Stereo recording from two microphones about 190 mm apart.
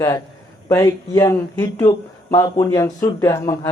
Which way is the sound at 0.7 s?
20° left (ahead or behind).